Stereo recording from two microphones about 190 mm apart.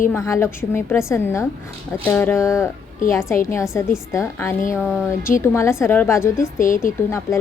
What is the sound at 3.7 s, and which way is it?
Speech, 15° left (ahead or behind).